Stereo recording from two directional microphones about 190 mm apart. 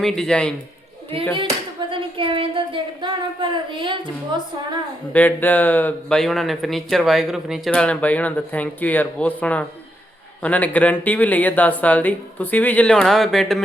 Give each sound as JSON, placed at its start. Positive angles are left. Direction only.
{"t": 0.0, "sound": "a man's voice", "side_deg": 5}
{"t": 1.4, "sound": "a sound", "side_deg": -25}
{"t": 5.1, "sound": "speech", "side_deg": 10}